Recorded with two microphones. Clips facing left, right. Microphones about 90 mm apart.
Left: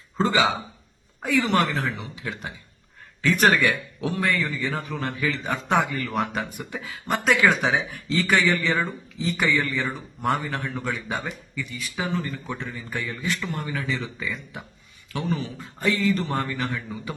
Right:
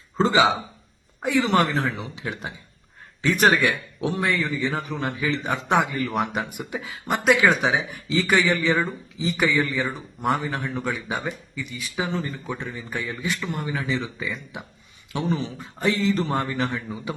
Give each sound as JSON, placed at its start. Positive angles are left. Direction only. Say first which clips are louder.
{"t": 0.2, "sound": "speech", "louder": "right 3 dB", "side_deg": -25}